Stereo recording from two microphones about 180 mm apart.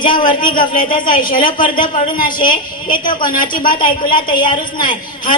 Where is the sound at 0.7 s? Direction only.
45° left (ahead or behind).